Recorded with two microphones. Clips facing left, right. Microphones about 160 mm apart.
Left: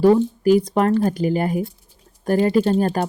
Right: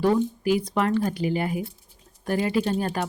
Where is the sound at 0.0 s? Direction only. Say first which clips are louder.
Left 7 dB; 40° left (ahead or behind).